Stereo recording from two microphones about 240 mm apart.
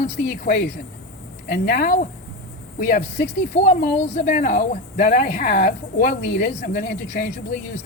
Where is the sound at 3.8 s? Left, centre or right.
Left.